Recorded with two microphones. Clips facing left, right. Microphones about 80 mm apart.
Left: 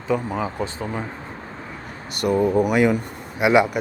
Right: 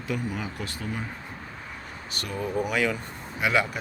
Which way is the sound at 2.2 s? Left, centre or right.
Left.